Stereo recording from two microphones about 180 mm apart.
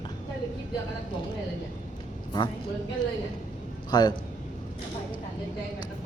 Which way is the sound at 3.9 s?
25° left (ahead or behind).